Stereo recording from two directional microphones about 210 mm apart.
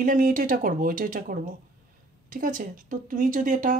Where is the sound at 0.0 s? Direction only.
40° right (ahead or behind).